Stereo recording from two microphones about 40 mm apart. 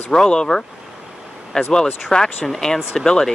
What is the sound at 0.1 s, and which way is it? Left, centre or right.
Speech, centre.